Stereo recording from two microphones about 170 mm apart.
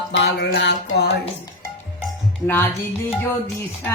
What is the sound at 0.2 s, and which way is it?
Music, 85° left.